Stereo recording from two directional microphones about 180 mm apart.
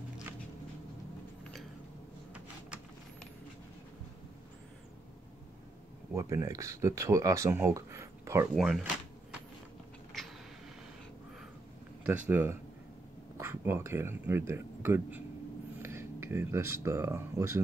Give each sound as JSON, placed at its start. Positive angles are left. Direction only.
{"t": 1.4, "sound": "a sound", "side_deg": 0}
{"t": 6.1, "sound": "speech", "side_deg": -15}
{"t": 8.5, "sound": "speech", "side_deg": 0}
{"t": 12.0, "sound": "speech", "side_deg": -10}